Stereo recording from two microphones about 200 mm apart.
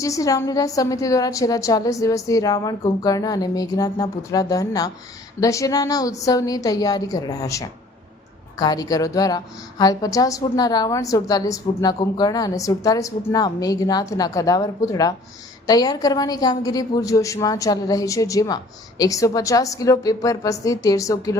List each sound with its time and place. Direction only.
0.0 s a woman's voice: 15° left (ahead or behind)